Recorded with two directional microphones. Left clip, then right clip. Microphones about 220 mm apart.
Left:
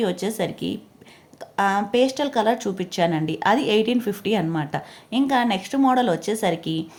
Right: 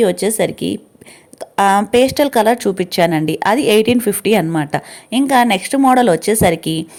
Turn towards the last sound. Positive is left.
turn(degrees=-30)  # may be behind; listen again after turning